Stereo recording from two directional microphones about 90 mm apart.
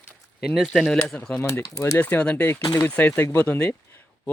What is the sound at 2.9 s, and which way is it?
Speech, 15° left (ahead or behind).